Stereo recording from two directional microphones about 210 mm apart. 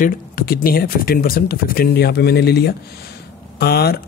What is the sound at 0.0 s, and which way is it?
Speech, 40° left (ahead or behind).